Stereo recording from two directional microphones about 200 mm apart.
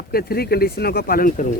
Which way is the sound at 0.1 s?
50° left (ahead or behind).